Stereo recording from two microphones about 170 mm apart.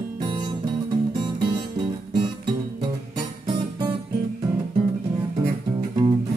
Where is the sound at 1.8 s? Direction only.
30° right (ahead or behind).